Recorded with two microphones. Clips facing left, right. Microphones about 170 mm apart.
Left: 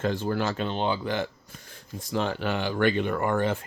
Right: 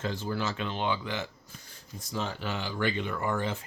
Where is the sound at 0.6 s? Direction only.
35° left (ahead or behind).